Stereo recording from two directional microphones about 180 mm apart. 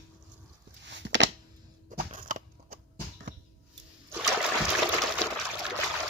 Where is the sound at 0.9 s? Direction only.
85° right.